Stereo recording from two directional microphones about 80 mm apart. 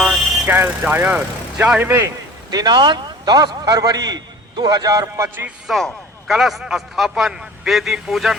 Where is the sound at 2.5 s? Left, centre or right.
Right.